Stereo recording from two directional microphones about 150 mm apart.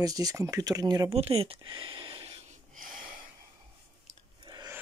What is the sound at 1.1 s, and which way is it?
Speech, 40° right (ahead or behind).